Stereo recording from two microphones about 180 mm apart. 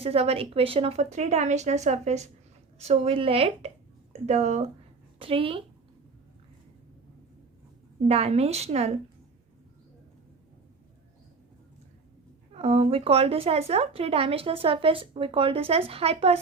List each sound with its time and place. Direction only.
0.0 s speech: 35° right (ahead or behind)
8.0 s speech: 35° right (ahead or behind)
12.5 s speech: 35° right (ahead or behind)